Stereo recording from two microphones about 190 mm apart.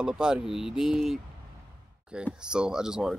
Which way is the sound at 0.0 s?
5° right (ahead or behind).